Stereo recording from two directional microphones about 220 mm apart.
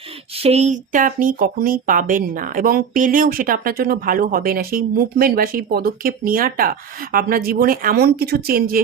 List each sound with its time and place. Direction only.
0.3 s speech: 30° right (ahead or behind)